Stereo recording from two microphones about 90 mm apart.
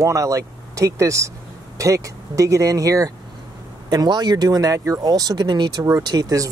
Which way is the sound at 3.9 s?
50° right (ahead or behind).